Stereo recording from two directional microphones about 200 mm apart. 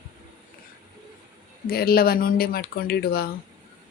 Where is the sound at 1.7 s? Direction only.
50° left (ahead or behind).